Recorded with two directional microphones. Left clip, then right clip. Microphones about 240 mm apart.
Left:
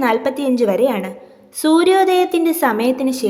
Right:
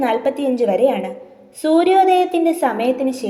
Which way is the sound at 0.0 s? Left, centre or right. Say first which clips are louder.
Left 1 dB; left.